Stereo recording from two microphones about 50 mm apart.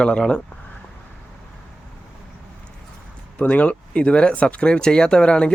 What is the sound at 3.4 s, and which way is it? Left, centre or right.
Speech, left.